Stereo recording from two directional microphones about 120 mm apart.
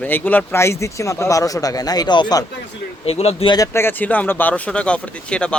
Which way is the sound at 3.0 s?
55° left (ahead or behind).